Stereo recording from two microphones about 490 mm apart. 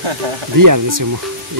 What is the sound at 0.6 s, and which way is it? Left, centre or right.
Speech, right.